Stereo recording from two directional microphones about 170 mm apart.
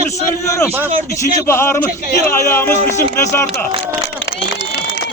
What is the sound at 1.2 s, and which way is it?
A man's voice, 15° left (ahead or behind).